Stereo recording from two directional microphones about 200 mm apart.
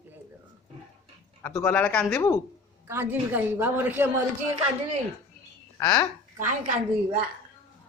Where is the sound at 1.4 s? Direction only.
10° left (ahead or behind).